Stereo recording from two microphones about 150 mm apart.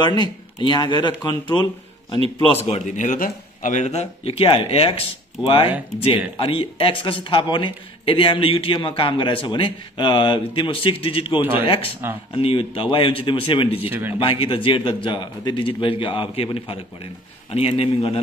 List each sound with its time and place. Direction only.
0.2 s speech: 30° left (ahead or behind)
2.6 s a man's voice: 50° left (ahead or behind)
13.8 s speech: 15° right (ahead or behind)
14.2 s a man's voice: 35° left (ahead or behind)